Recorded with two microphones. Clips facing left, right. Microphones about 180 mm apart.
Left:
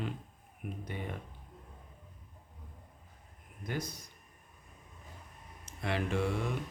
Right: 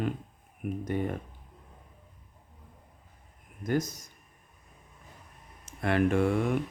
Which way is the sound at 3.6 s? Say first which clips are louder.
Right 9 dB; 45° right (ahead or behind).